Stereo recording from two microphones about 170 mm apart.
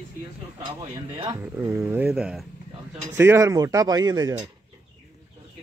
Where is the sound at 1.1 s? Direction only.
25° right (ahead or behind).